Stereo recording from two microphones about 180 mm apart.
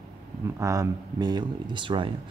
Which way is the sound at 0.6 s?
20° right (ahead or behind).